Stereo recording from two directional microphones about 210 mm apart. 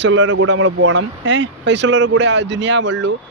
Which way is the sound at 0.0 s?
60° right (ahead or behind).